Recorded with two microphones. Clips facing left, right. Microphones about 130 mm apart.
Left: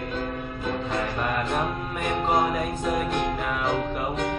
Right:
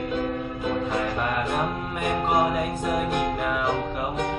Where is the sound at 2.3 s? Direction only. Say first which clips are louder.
Right 1 dB; 5° right (ahead or behind).